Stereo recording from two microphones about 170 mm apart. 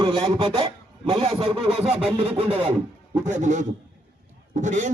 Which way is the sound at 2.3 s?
35° right (ahead or behind).